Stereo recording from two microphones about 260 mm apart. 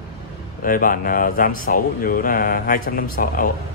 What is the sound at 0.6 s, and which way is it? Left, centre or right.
Speech, left.